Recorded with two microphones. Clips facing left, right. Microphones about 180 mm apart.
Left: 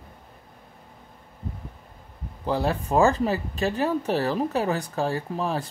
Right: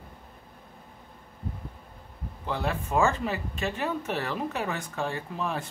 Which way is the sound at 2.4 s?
35° left (ahead or behind).